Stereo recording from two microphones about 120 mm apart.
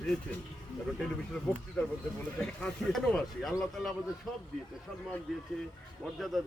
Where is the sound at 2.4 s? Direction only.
5° left (ahead or behind).